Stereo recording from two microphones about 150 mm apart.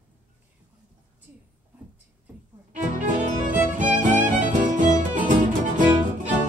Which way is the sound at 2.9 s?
60° right (ahead or behind).